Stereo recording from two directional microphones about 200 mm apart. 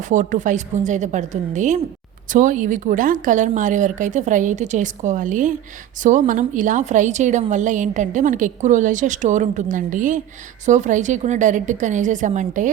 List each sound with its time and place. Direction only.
0.1 s a woman's voice: 40° right (ahead or behind)